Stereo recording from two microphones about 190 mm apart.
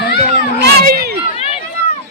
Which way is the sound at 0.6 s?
55° right (ahead or behind).